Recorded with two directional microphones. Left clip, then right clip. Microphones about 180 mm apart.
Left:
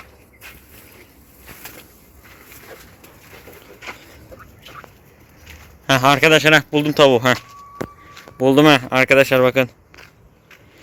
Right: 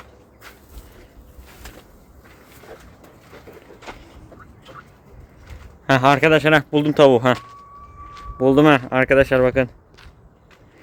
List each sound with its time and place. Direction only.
5.8 s speech: 10° right (ahead or behind)
6.7 s speech: 20° right (ahead or behind)
8.4 s speech: 5° right (ahead or behind)